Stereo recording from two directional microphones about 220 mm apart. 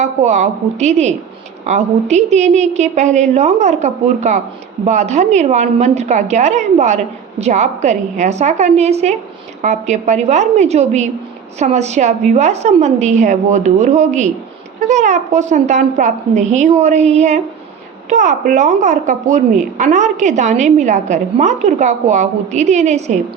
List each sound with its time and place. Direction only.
0.0 s a woman's voice: 30° right (ahead or behind)